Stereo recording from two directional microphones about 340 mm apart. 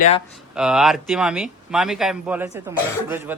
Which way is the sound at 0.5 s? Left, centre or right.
Centre.